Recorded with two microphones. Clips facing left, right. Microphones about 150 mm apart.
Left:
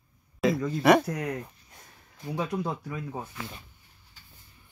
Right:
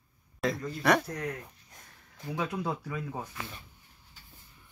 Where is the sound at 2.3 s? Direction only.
10° left (ahead or behind).